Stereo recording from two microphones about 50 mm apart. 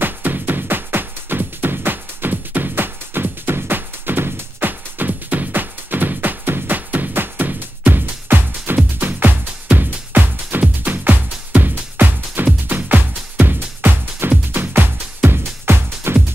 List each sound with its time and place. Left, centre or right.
0.0 s music: right
15.2 s music: right